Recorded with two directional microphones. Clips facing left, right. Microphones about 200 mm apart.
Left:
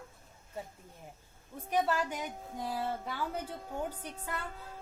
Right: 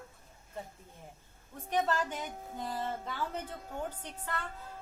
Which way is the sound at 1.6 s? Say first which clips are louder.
Left 1 dB; 10° left (ahead or behind).